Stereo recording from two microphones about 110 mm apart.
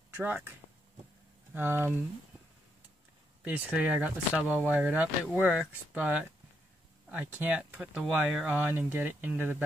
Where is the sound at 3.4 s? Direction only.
15° right (ahead or behind).